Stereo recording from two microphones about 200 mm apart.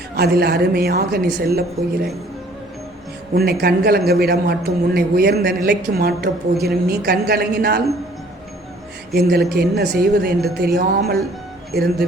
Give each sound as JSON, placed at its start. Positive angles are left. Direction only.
{"t": 0.2, "sound": "a woman's voice", "side_deg": -50}
{"t": 3.3, "sound": "a woman's voice", "side_deg": -50}
{"t": 9.1, "sound": "a woman's voice", "side_deg": -55}